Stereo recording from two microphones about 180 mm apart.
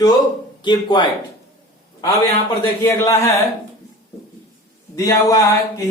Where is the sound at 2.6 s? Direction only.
15° left (ahead or behind).